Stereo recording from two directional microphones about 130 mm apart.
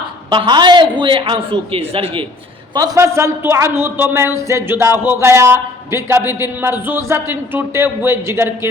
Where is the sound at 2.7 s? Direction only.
30° right (ahead or behind).